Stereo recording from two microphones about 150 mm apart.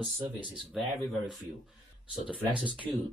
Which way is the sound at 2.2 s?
10° right (ahead or behind).